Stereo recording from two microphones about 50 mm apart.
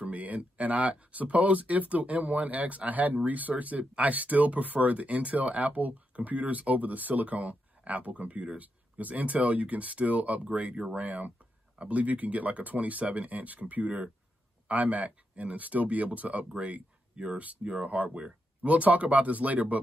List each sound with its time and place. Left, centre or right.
0.0 s speech: right